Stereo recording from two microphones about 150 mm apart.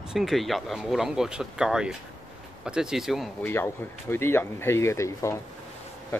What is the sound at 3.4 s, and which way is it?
Speech, 15° left (ahead or behind).